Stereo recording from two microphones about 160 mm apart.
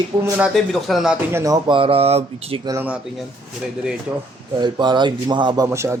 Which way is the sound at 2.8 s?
10° right (ahead or behind).